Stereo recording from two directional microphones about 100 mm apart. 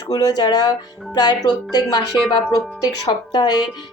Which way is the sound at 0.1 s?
40° left (ahead or behind).